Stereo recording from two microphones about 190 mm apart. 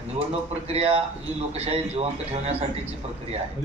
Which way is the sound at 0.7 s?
30° right (ahead or behind).